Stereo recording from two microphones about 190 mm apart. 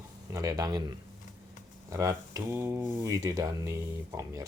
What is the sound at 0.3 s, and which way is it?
Speech, 20° right (ahead or behind).